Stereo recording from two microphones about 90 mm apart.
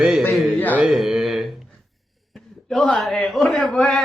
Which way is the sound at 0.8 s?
5° right (ahead or behind).